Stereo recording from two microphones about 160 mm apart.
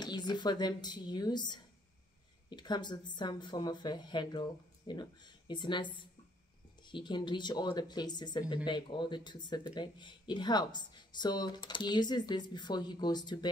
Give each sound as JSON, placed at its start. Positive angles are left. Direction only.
{"t": 0.0, "sound": "speech", "side_deg": 25}